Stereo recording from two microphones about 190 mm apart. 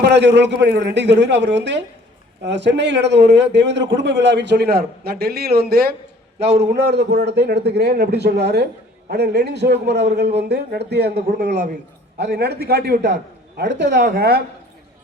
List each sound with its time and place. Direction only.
0.0 s a man's voice: 65° right (ahead or behind)
6.5 s a man's voice: 35° right (ahead or behind)
6.7 s a man's voice: 60° right (ahead or behind)